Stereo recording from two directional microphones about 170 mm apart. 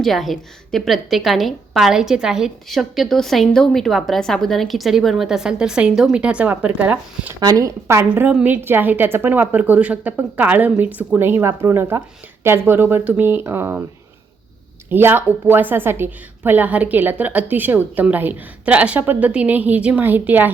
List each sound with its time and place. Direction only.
0.0 s a woman's voice: centre (ahead or behind)
7.3 s a woman's voice: 20° right (ahead or behind)
14.8 s a woman's voice: 10° right (ahead or behind)